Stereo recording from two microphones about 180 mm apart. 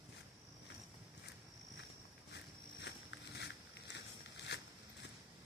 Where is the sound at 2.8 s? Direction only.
75° left (ahead or behind).